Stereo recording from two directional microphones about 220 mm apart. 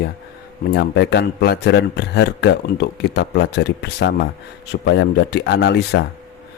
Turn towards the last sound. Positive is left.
turn(degrees=50)  # may be behind; listen again after turning